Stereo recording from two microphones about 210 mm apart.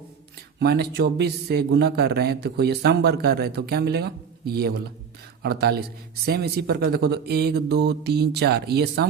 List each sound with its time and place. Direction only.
0.6 s speech: 50° right (ahead or behind)